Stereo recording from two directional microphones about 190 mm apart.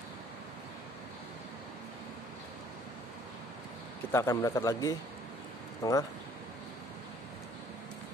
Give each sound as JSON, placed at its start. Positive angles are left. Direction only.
{"t": 4.1, "sound": "speech", "side_deg": 15}